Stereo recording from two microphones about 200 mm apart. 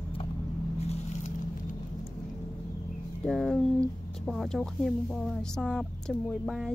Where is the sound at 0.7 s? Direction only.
35° left (ahead or behind).